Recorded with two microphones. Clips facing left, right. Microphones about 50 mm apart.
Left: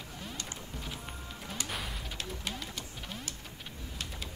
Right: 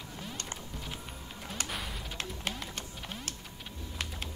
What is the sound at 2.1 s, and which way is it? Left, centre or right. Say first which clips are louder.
Music: right 3 dB; right.